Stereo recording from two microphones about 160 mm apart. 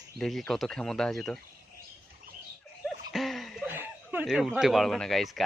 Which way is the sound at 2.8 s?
Centre (ahead or behind).